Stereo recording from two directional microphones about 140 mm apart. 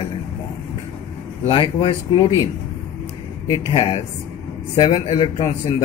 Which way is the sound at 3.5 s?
40° left (ahead or behind).